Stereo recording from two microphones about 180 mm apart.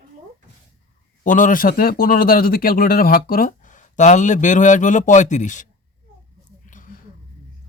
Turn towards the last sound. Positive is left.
turn(degrees=45)  # may be behind; listen again after turning